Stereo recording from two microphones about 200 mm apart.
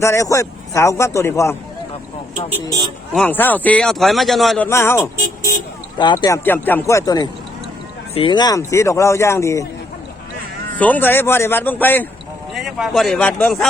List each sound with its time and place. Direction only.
0.0 s a man's voice: 15° left (ahead or behind)
2.6 s speech: 20° right (ahead or behind)
3.2 s a man's voice: 10° left (ahead or behind)
10.8 s a man's voice: 10° left (ahead or behind)